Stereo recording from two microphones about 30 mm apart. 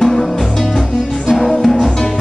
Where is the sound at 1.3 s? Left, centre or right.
Centre.